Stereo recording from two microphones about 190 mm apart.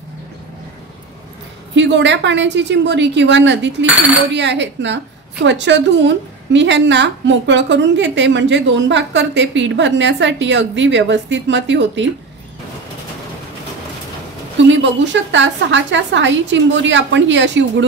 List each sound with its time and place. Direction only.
1.8 s a woman's voice: 70° right (ahead or behind)
15.3 s a woman's voice: 75° right (ahead or behind)